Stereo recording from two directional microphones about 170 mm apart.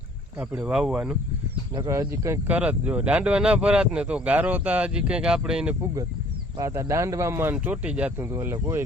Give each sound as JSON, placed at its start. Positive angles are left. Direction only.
{"t": 0.3, "sound": "speech", "side_deg": -5}
{"t": 1.7, "sound": "speech", "side_deg": -20}
{"t": 6.6, "sound": "speech", "side_deg": -20}